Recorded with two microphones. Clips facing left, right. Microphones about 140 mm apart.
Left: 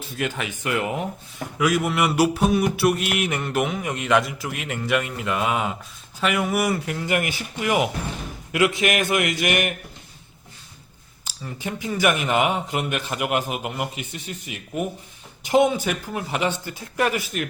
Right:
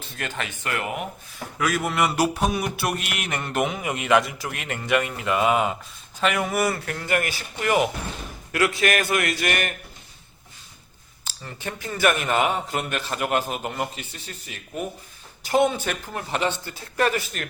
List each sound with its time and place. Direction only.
0.2 s a man's voice: 10° left (ahead or behind)
1.5 s mantra: 10° left (ahead or behind)
6.1 s a man's voice: 5° left (ahead or behind)
11.3 s a man's voice: 10° left (ahead or behind)